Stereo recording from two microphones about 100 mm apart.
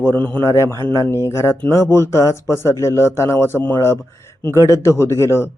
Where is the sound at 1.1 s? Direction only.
25° left (ahead or behind).